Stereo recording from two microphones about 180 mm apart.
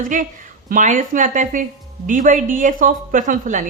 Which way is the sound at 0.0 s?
50° right (ahead or behind).